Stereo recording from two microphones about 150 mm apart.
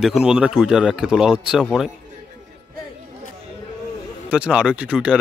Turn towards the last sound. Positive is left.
turn(degrees=-10)  # may be behind; listen again after turning